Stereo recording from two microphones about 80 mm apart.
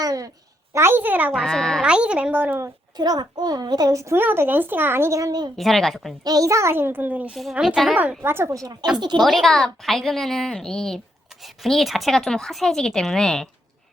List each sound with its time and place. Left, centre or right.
0.0 s a sound: right
0.7 s speech: right
1.3 s a child's voice: centre
1.8 s a woman's voice: centre
2.3 s speech: right
3.0 s a child's voice: right
4.0 s speech: right
5.2 s a child's voice: right
5.5 s speech: centre
6.2 s speech: right; by 7.3 s centre
8.2 s speech: right
8.5 s a child's voice: right
9.0 s a child's voice: right
9.2 s speech: centre